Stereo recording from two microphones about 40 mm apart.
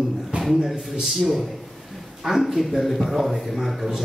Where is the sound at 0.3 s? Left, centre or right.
Right.